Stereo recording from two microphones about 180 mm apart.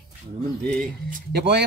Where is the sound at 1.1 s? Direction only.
65° right (ahead or behind).